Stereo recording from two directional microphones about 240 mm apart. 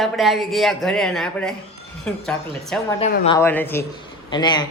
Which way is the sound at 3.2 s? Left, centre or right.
Centre.